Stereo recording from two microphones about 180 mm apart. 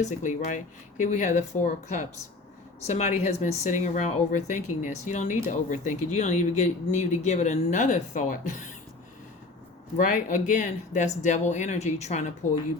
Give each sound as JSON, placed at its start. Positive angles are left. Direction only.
{"t": 0.0, "sound": "speech", "side_deg": 45}
{"t": 10.0, "sound": "speech", "side_deg": 45}